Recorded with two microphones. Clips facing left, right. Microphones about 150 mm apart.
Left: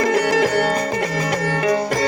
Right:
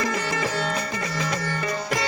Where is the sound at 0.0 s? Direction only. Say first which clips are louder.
Left 9 dB; 70° left (ahead or behind).